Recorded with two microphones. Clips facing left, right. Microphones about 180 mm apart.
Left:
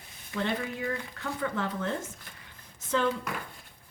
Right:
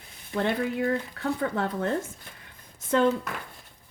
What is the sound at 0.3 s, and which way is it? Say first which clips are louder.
Speech: right 5 dB; 55° right (ahead or behind).